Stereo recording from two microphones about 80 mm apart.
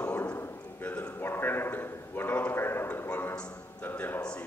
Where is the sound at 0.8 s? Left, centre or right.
Centre.